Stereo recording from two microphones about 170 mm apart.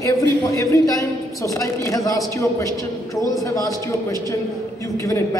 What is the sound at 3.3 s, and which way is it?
A man's voice, 20° left (ahead or behind).